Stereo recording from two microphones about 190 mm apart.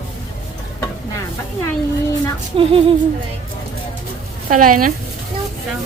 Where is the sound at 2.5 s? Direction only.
30° right (ahead or behind).